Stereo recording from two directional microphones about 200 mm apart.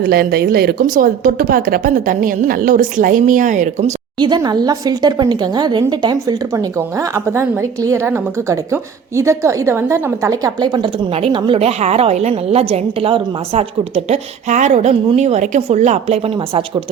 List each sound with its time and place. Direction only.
0.0 s a woman's voice: 50° right (ahead or behind)
4.2 s a woman's voice: 20° right (ahead or behind)